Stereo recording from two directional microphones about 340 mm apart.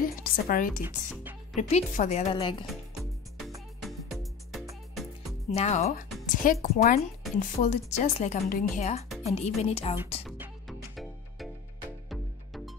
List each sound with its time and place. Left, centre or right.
0.0 s a woman's voice: left
0.8 s music: centre
1.6 s a woman's voice: centre
2.6 s music: centre
5.5 s a woman's voice: centre
10.2 s music: centre